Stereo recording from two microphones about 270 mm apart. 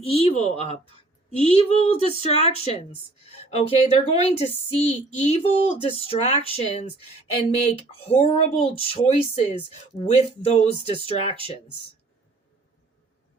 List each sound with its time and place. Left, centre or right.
0.0 s a woman's voice: left